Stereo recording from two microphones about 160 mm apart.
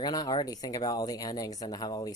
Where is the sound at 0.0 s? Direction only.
25° left (ahead or behind).